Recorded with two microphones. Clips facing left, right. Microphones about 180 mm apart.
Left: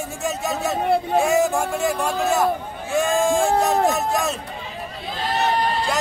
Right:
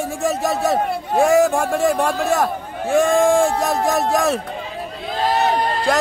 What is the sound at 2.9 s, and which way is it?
Speech, 60° right (ahead or behind).